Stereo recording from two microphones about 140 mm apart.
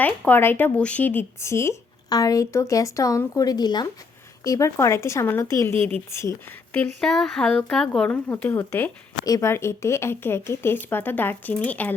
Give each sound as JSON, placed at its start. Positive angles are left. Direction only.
{"t": 0.0, "sound": "speech", "side_deg": 15}
{"t": 6.7, "sound": "speech", "side_deg": 5}